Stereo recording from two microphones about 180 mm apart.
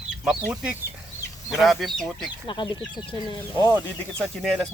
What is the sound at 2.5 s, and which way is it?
Speech, 25° left (ahead or behind).